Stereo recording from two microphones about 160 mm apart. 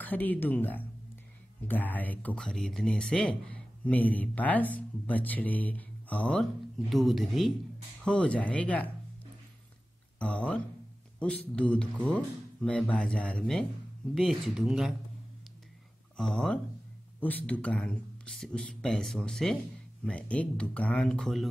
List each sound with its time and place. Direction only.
0.0 s speech: 10° left (ahead or behind)
10.1 s speech: 5° left (ahead or behind)
16.2 s speech: 5° left (ahead or behind)